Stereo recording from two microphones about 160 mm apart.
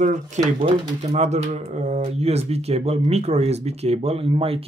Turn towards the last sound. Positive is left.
turn(degrees=-35)  # may be behind; listen again after turning